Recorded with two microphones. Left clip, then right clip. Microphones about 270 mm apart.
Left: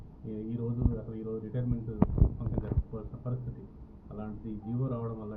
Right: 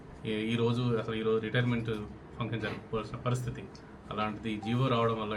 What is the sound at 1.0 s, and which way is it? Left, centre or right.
Speech, right.